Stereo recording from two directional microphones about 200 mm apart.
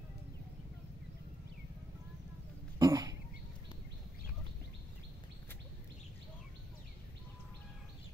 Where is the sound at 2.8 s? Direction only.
20° right (ahead or behind).